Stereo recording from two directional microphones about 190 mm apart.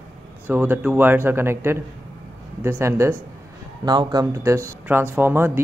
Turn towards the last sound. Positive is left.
turn(degrees=-10)  # may be behind; listen again after turning